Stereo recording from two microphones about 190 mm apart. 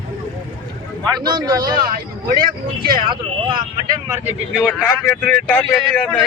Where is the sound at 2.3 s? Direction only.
50° right (ahead or behind).